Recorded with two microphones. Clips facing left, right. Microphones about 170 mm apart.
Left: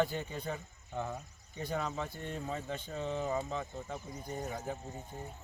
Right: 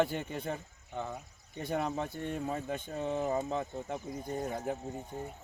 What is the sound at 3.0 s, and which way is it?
Speech, 15° right (ahead or behind).